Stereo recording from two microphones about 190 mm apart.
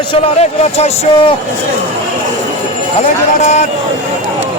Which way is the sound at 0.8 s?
35° left (ahead or behind).